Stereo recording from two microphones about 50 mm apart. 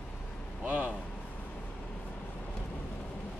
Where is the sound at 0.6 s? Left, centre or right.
Right.